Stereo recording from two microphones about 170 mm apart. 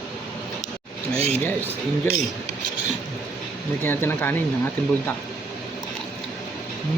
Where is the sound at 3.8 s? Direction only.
15° left (ahead or behind).